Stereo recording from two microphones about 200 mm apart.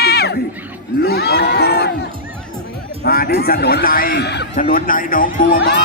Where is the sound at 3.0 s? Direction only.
50° left (ahead or behind).